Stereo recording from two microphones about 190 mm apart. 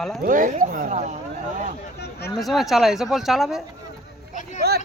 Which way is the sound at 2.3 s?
Centre (ahead or behind).